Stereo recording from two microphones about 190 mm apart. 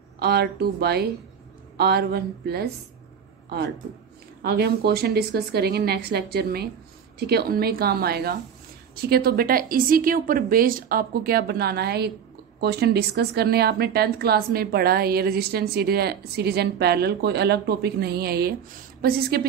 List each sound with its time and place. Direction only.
0.2 s a woman's voice: 55° right (ahead or behind)